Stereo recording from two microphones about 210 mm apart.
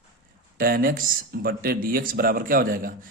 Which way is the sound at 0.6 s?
45° right (ahead or behind).